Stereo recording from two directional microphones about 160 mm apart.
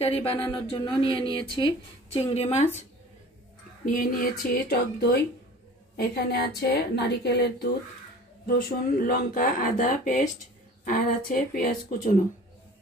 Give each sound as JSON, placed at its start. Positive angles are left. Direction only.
{"t": 0.0, "sound": "speech", "side_deg": 40}
{"t": 3.8, "sound": "a woman's voice", "side_deg": 60}
{"t": 8.5, "sound": "speech", "side_deg": 70}